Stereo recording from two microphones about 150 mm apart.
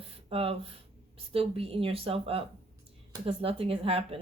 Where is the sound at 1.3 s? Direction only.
40° right (ahead or behind).